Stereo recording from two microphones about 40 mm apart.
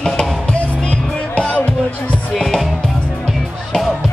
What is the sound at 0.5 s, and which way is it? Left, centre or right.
Music, left.